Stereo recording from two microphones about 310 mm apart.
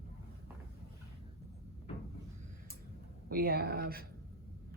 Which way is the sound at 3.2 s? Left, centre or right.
Right.